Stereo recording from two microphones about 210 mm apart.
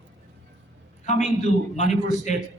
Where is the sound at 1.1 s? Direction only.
35° left (ahead or behind).